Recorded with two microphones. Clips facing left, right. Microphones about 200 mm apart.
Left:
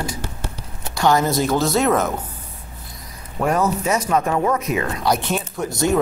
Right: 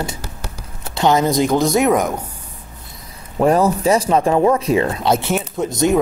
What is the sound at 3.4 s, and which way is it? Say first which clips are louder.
Speech: right 5 dB; 30° right (ahead or behind).